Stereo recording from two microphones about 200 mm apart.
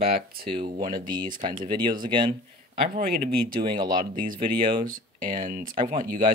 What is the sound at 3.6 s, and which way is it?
Speech, 25° right (ahead or behind).